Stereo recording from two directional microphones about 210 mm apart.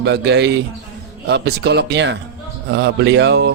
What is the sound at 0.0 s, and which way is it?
Speech, 55° right (ahead or behind).